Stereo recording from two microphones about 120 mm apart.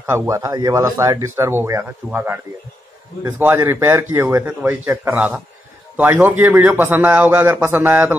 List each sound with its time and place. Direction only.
0.3 s a man's voice: 25° right (ahead or behind)